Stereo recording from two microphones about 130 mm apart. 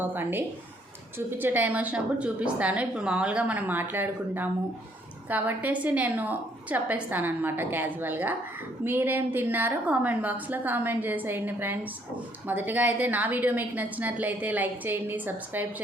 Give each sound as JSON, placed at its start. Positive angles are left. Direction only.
{"t": 0.0, "sound": "a woman's voice", "side_deg": -15}